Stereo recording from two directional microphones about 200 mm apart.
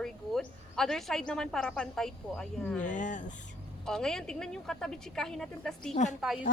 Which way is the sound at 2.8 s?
40° left (ahead or behind).